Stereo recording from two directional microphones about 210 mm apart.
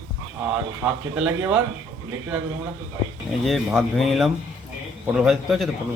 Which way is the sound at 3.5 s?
Centre (ahead or behind).